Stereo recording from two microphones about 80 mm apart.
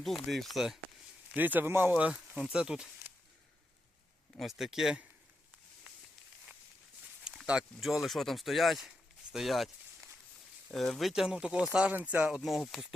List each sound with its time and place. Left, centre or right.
0.0 s speech: centre
1.3 s speech: right
1.9 s speech: centre
4.4 s speech: centre
7.3 s a sound: centre
7.8 s speech: centre
10.7 s speech: centre
12.4 s speech: centre